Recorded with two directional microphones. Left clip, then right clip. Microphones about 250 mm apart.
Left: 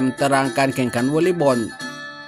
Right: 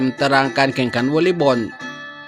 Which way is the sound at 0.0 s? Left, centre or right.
Centre.